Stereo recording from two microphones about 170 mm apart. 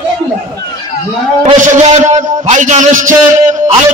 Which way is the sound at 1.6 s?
45° right (ahead or behind).